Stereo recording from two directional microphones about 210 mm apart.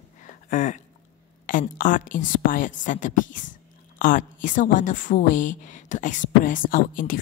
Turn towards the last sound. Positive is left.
turn(degrees=40)  # may be behind; listen again after turning